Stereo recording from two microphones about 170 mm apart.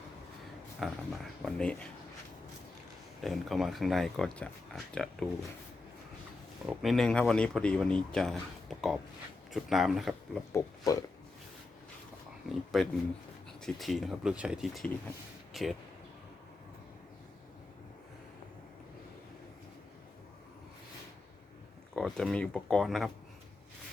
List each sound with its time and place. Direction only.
0.8 s speech: centre (ahead or behind)
3.2 s speech: centre (ahead or behind)
6.7 s speech: centre (ahead or behind)
9.5 s speech: centre (ahead or behind)
10.5 s speech: 20° left (ahead or behind)
12.5 s speech: centre (ahead or behind)
21.9 s speech: 5° left (ahead or behind)